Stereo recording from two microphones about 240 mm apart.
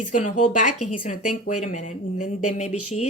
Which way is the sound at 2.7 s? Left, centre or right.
Left.